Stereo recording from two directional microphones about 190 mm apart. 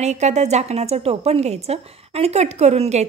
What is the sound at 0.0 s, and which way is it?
Speech, 35° right (ahead or behind).